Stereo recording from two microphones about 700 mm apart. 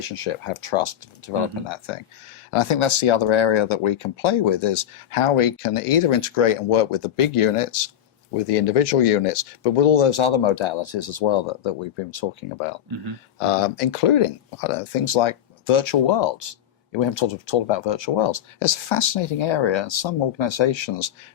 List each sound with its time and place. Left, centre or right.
0.0 s speech: left